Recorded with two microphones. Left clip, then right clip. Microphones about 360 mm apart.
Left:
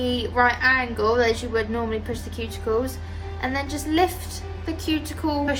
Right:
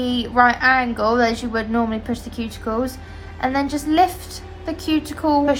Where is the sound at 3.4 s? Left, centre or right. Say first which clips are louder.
Right 6 dB; centre.